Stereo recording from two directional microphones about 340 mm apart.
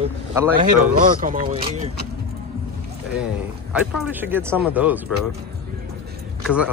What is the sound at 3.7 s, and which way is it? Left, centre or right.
A child's voice, centre.